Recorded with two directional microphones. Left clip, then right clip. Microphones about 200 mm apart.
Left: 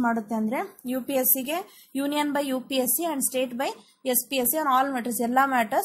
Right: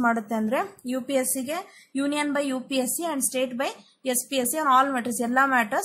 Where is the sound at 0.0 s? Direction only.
5° right (ahead or behind).